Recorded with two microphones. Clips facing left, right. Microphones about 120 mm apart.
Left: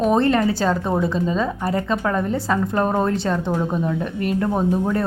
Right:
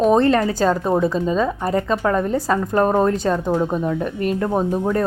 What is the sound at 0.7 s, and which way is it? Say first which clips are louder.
Speech: right 3 dB; 10° right (ahead or behind).